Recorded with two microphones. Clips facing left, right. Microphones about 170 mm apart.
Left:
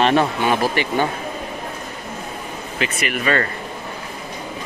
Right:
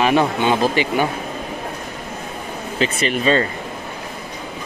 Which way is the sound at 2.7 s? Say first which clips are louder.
Right 4 dB; 30° right (ahead or behind).